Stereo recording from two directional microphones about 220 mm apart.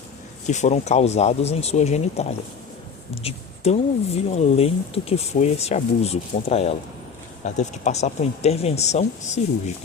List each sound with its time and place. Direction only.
0.4 s a woman's voice: 30° left (ahead or behind)